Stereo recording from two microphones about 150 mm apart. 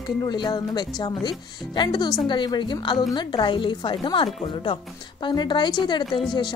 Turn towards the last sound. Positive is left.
turn(degrees=0)  # may be behind; listen again after turning